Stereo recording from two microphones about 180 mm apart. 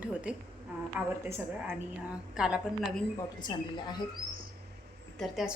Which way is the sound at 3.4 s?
25° left (ahead or behind).